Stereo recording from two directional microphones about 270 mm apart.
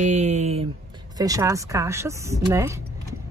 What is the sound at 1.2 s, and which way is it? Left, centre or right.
Speech, centre.